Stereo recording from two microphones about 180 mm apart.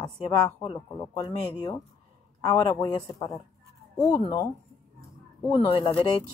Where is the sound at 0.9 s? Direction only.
20° left (ahead or behind).